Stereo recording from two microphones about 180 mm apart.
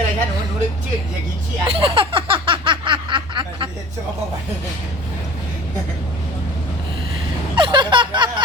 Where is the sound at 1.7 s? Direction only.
30° right (ahead or behind).